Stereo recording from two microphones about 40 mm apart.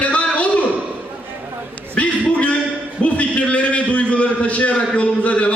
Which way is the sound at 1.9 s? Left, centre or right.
Left.